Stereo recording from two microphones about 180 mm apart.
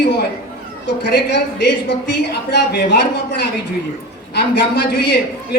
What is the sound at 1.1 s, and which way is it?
A woman's voice, 70° left (ahead or behind).